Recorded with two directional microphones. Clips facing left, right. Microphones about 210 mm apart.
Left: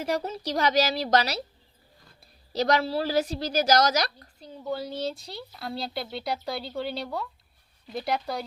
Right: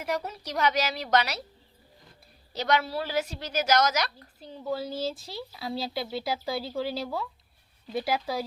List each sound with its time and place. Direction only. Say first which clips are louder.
0.0 s a woman's voice: left 3 dB; 30° left (ahead or behind)
2.5 s a woman's voice: left 3 dB; 35° left (ahead or behind)
4.4 s speech: even; centre (ahead or behind)